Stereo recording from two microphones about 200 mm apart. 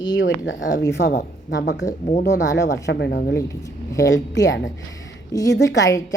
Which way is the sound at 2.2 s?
60° left (ahead or behind).